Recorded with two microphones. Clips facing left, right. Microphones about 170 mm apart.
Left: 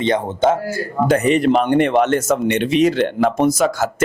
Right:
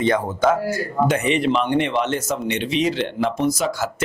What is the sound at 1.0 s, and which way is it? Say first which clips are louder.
Speech: left 5 dB; 40° left (ahead or behind).